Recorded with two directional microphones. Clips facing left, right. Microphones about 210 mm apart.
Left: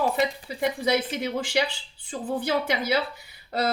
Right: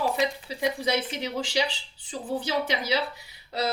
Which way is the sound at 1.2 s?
55° left (ahead or behind).